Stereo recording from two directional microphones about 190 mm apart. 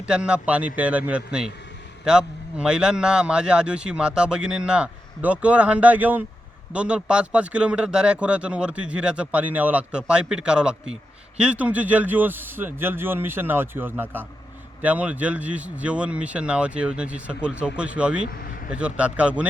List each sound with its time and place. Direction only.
0.0 s a man's voice: 5° right (ahead or behind)
18.3 s a sound: 50° left (ahead or behind)
18.7 s speech: 5° right (ahead or behind)